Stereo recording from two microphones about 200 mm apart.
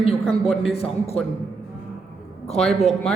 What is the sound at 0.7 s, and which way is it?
Speech, 30° left (ahead or behind).